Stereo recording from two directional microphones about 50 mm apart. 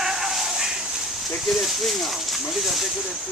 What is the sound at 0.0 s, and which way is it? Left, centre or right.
Dog, centre.